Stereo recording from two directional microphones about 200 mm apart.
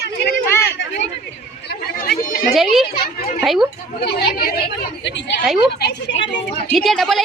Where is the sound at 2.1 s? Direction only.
45° left (ahead or behind).